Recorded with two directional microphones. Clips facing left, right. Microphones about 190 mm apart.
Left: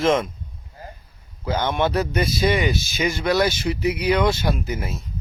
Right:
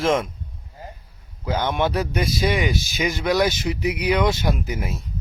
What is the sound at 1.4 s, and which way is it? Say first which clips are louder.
A man's voice: left 1 dB; 10° right (ahead or behind).